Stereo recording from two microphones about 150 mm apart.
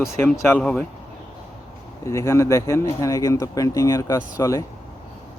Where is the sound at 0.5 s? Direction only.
10° left (ahead or behind).